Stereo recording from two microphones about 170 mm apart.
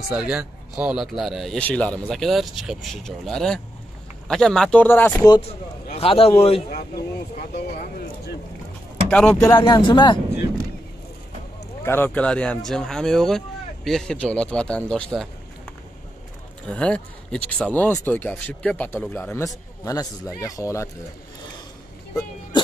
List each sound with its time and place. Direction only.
0.1 s speech: 5° right (ahead or behind); by 5.2 s 10° left (ahead or behind)
5.9 s a man's voice: 35° left (ahead or behind)
9.1 s speech: 5° left (ahead or behind)
9.6 s speech: 25° left (ahead or behind)
11.8 s speech: 15° left (ahead or behind)
16.7 s speech: 5° left (ahead or behind)